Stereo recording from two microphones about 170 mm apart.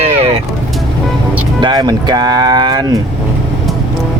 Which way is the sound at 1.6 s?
25° right (ahead or behind).